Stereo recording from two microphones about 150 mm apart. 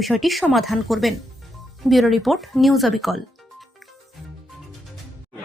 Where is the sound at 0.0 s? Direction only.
Centre (ahead or behind).